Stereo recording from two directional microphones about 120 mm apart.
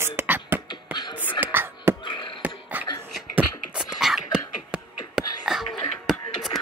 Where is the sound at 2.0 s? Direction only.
40° left (ahead or behind).